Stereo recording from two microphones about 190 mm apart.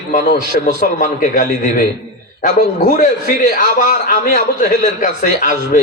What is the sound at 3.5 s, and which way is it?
A man's voice, 45° left (ahead or behind).